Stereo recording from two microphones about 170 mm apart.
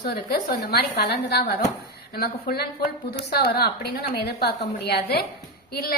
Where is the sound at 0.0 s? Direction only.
65° left (ahead or behind).